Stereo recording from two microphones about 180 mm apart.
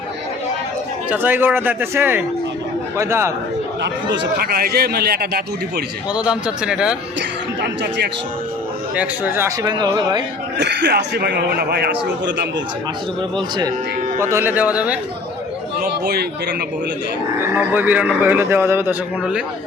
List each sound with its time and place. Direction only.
1.1 s speech: 10° right (ahead or behind)
4.1 s a man's voice: 65° right (ahead or behind)
6.1 s a man's voice: 5° right (ahead or behind)
7.2 s a man's voice: 75° right (ahead or behind)
9.0 s speech: 10° right (ahead or behind)
10.6 s a man's voice: 70° right (ahead or behind)
13.3 s speech: 20° right (ahead or behind)
15.8 s a man's voice: 60° right (ahead or behind)
17.5 s speech: 10° right (ahead or behind)